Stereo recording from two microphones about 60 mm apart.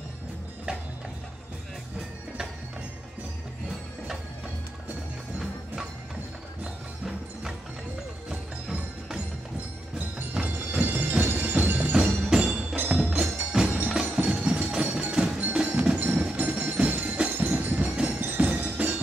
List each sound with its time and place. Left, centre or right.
10.4 s music: right
13.2 s music: centre
13.8 s wood block: centre
15.5 s music: right